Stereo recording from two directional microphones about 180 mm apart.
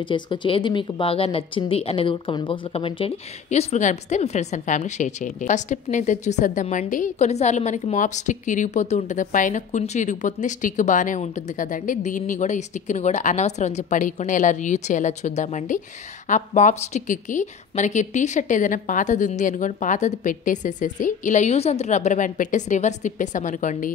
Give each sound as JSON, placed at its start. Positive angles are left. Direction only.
{"t": 0.0, "sound": "a woman's voice", "side_deg": 25}